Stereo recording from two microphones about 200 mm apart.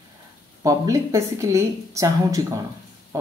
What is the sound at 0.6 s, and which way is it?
A man's voice, 15° right (ahead or behind).